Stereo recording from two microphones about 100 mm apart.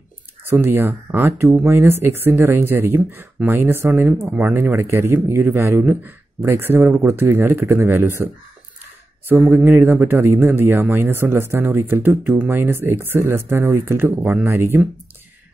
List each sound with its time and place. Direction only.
0.5 s speech: 25° right (ahead or behind)
9.5 s speech: 20° right (ahead or behind)